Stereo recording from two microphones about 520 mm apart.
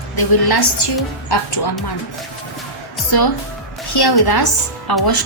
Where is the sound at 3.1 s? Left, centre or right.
Left.